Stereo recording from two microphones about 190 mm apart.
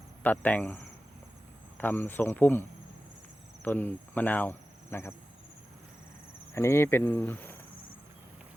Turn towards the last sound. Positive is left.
turn(degrees=10)  # may be behind; listen again after turning